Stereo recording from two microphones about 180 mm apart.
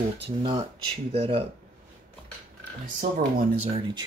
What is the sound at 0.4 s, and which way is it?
Cutlery, 30° right (ahead or behind).